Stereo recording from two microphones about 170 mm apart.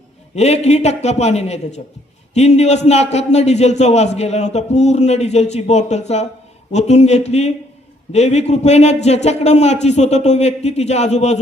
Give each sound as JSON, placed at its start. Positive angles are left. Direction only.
{"t": 0.3, "sound": "a man's voice", "side_deg": 40}